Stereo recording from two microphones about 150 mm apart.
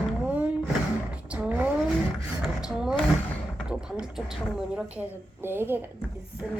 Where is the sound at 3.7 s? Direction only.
5° right (ahead or behind).